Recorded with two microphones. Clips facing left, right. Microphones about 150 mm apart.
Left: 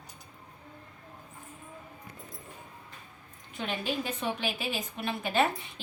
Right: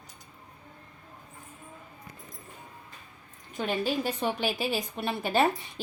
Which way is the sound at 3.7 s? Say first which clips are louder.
Right 4 dB; 35° right (ahead or behind).